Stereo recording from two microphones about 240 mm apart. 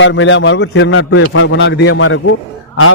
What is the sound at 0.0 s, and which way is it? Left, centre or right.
A man's voice, left.